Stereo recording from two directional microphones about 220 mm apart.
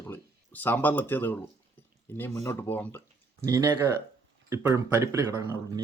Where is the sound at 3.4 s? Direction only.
15° right (ahead or behind).